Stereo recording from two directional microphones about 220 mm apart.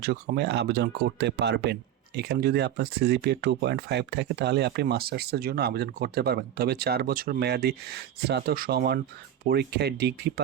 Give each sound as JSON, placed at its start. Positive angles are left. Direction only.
{"t": 0.0, "sound": "speech", "side_deg": -45}